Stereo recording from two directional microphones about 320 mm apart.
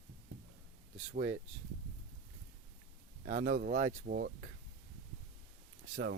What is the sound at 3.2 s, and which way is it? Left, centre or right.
Speech, right.